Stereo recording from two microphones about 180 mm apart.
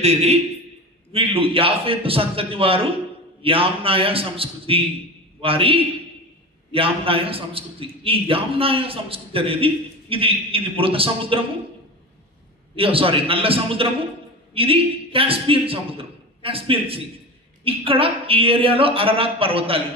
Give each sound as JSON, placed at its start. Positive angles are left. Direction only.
{"t": 0.0, "sound": "a man's voice", "side_deg": -35}
{"t": 12.7, "sound": "a man's voice", "side_deg": -30}